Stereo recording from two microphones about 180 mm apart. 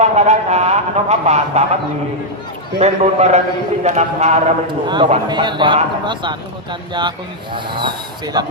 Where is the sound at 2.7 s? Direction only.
35° right (ahead or behind).